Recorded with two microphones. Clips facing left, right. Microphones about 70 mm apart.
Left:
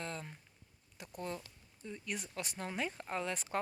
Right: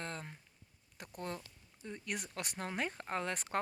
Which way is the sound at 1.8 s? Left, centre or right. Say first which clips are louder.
Right 1 dB; right.